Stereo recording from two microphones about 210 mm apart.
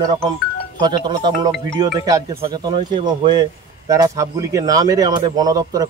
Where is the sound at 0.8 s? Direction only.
20° right (ahead or behind).